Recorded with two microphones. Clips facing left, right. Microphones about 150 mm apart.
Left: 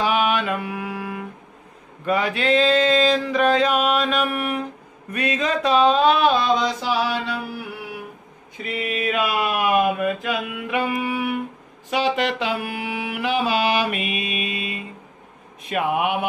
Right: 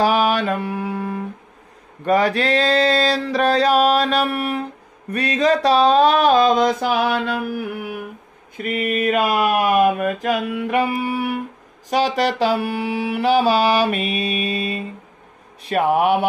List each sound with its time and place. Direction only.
0.0 s mantra: 35° right (ahead or behind)
5.1 s a sound: 35° right (ahead or behind)
11.9 s mantra: 40° right (ahead or behind)